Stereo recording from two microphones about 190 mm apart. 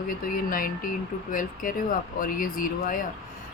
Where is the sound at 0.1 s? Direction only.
45° left (ahead or behind).